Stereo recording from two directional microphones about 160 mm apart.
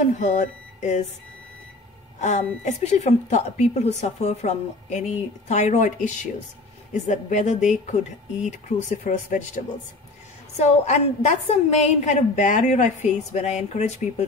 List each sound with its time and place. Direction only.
0.0 s speech: 50° left (ahead or behind)
2.1 s a woman's voice: 50° left (ahead or behind)
10.6 s a woman's voice: 45° left (ahead or behind)